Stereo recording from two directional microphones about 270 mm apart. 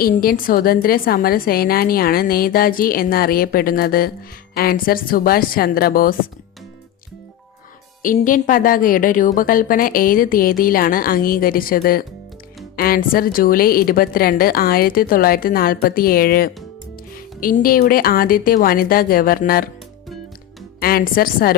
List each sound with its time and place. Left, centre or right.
0.0 s a woman's voice: left
8.0 s a woman's voice: left
20.7 s a woman's voice: left